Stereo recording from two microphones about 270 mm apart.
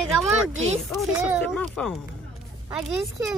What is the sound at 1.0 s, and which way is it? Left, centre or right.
Speech, centre.